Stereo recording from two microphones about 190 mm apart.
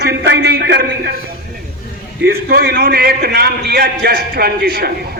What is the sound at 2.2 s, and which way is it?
A man's voice, 55° right (ahead or behind).